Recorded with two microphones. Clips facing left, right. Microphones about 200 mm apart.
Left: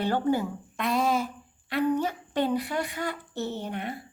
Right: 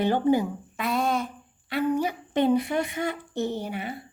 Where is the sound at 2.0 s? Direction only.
15° right (ahead or behind).